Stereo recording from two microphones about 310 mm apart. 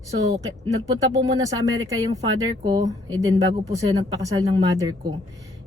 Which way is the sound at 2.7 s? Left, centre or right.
Centre.